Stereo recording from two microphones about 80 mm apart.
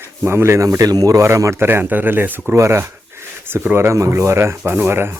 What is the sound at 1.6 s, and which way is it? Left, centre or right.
Speech, right.